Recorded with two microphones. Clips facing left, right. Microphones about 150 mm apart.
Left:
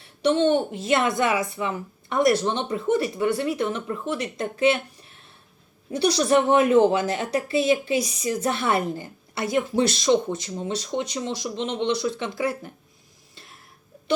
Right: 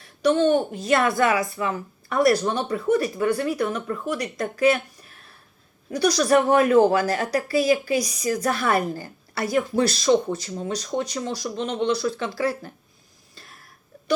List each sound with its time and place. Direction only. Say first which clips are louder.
0.0 s a woman's voice: right 1 dB; 30° left (ahead or behind)